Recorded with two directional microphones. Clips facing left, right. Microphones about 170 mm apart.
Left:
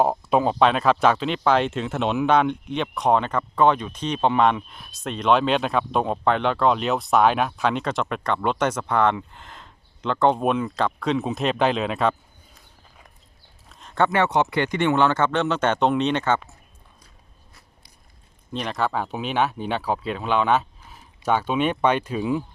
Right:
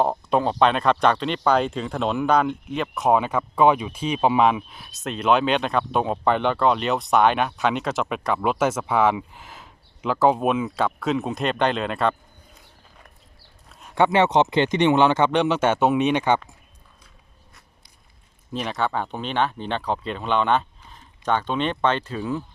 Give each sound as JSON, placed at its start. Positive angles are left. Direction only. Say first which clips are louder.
{"t": 0.0, "sound": "speech", "louder": "left 1 dB", "side_deg": 5}
{"t": 13.7, "sound": "speech", "louder": "right 2 dB", "side_deg": -5}
{"t": 18.5, "sound": "speech", "louder": "even", "side_deg": 0}